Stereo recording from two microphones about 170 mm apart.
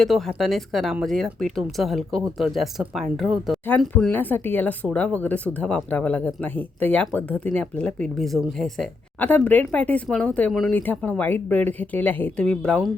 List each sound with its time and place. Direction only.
0.0 s speech: centre (ahead or behind)